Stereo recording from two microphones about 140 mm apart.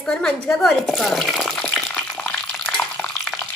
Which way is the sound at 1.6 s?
10° left (ahead or behind).